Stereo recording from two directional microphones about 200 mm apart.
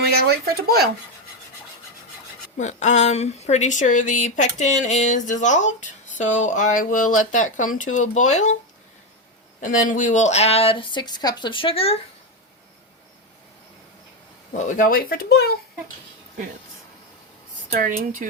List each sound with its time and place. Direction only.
0.0 s speech: 50° right (ahead or behind)
2.6 s speech: 35° left (ahead or behind)
9.6 s speech: 40° left (ahead or behind)
14.6 s speech: 40° left (ahead or behind)
17.7 s speech: 40° right (ahead or behind)